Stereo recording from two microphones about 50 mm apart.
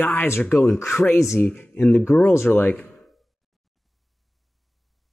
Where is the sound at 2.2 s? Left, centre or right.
Left.